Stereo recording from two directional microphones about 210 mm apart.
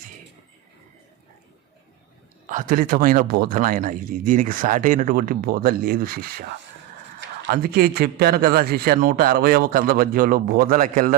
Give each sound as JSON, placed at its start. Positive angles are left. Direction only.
{"t": 2.5, "sound": "a man's voice", "side_deg": -40}